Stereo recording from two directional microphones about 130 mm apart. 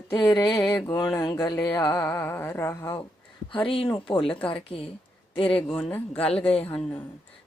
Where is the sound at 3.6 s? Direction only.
45° left (ahead or behind).